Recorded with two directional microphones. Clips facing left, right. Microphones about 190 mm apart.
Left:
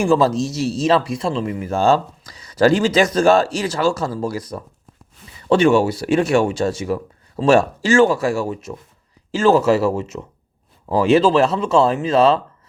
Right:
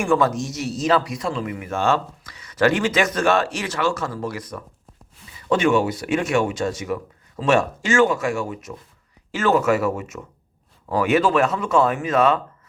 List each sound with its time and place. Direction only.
0.0 s a man's voice: 30° left (ahead or behind)